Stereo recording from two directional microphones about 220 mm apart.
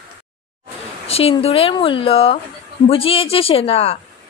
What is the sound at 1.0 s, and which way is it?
Speech, 25° left (ahead or behind).